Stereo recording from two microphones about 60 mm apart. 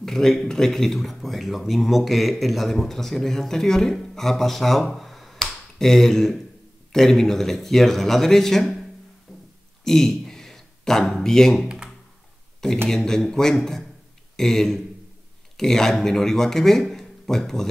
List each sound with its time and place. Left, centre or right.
0.0 s speech: centre
4.9 s finger snapping: centre
6.9 s speech: centre
9.3 s music: centre
9.8 s a sound: centre
11.5 s computer keyboard: centre
12.8 s speech: centre